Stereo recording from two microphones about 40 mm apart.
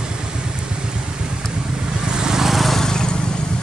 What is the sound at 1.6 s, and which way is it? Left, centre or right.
Vehicle, centre.